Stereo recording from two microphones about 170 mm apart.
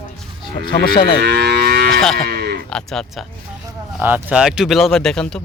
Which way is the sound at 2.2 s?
65° right (ahead or behind).